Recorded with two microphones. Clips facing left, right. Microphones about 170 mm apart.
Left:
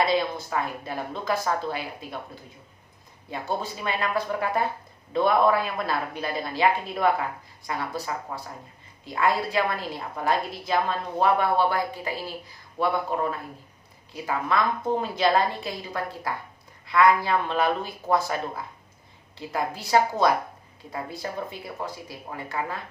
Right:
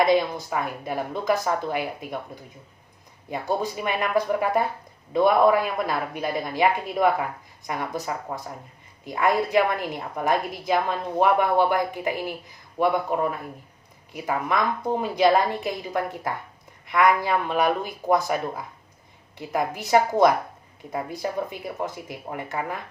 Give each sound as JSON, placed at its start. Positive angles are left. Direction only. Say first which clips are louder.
{"t": 0.0, "sound": "a woman's voice", "louder": "right 4 dB", "side_deg": -15}